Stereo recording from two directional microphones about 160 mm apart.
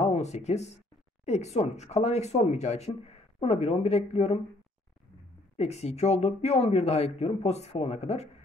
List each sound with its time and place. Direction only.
0.0 s speech: 45° left (ahead or behind)
5.6 s speech: 40° left (ahead or behind)